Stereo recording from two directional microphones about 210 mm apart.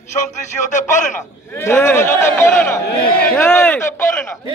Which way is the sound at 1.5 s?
10° left (ahead or behind).